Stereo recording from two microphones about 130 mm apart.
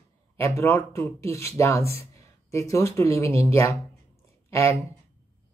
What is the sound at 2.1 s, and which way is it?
A woman's voice, 25° left (ahead or behind).